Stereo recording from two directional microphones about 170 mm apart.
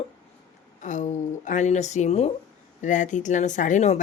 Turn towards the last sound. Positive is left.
turn(degrees=45)  # may be behind; listen again after turning